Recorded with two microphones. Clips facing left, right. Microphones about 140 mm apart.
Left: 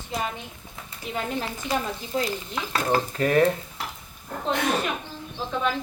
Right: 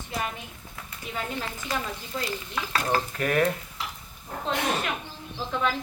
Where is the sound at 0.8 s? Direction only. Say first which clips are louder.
Even; 20° left (ahead or behind).